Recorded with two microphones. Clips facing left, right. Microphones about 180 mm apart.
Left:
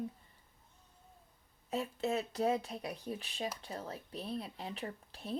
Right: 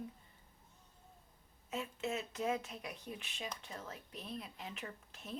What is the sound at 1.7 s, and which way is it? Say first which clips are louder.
Speech: left 5 dB; 35° left (ahead or behind).